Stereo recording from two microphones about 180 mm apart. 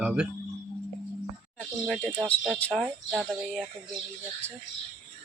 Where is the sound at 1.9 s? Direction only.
Centre (ahead or behind).